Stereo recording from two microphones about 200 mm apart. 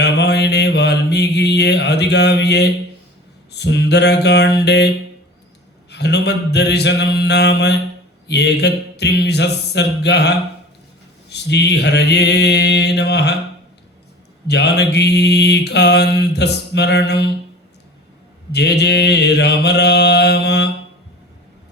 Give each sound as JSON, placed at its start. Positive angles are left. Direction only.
{"t": 0.0, "sound": "mantra", "side_deg": 55}
{"t": 5.9, "sound": "mantra", "side_deg": 55}
{"t": 14.4, "sound": "mantra", "side_deg": 55}
{"t": 18.5, "sound": "mantra", "side_deg": 55}